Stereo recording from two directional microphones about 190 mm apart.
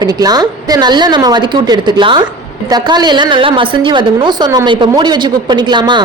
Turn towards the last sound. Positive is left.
turn(degrees=-25)  # may be behind; listen again after turning